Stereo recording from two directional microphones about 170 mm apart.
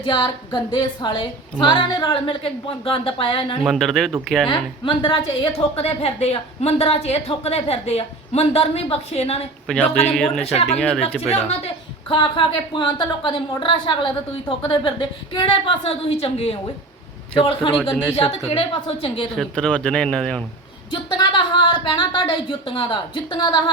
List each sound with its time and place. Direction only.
0.0 s a woman's voice: 25° left (ahead or behind)
3.6 s speech: centre (ahead or behind)
4.4 s a woman's voice: 30° left (ahead or behind)
9.6 s speech: 5° left (ahead or behind)
11.3 s a woman's voice: 35° left (ahead or behind)
19.4 s speech: 5° left (ahead or behind)
20.9 s speech: 30° left (ahead or behind)